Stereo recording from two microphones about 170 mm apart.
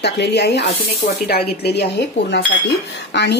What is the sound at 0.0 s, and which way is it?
Speech, 80° left.